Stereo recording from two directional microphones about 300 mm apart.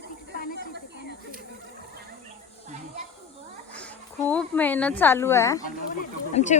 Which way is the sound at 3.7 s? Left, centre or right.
Centre.